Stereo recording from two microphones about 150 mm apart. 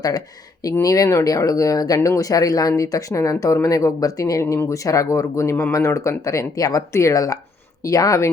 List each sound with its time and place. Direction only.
0.6 s speech: 25° left (ahead or behind)